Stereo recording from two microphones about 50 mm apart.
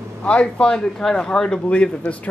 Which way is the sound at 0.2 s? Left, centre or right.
Left.